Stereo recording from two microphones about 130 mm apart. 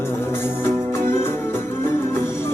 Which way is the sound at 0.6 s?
20° left (ahead or behind).